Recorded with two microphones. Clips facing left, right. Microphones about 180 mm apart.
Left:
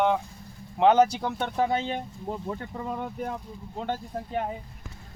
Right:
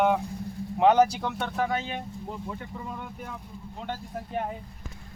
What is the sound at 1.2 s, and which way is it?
Speech, 15° left (ahead or behind).